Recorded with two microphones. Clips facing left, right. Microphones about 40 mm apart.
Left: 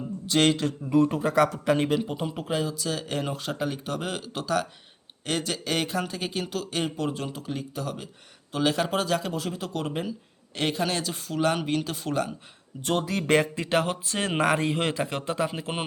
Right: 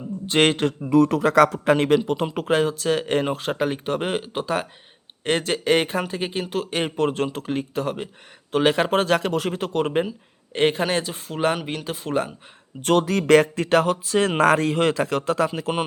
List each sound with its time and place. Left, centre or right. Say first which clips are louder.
0.3 s speech: right 4 dB; right
0.9 s a man's voice: right 5 dB; right
10.1 s speech: right 1 dB; right
11.5 s speech: left 1 dB; centre
12.8 s a man's voice: right 7 dB; right
14.9 s speech: right 6 dB; right